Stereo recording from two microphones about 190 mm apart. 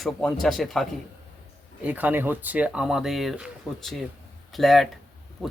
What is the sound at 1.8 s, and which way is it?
Speech, 10° right (ahead or behind).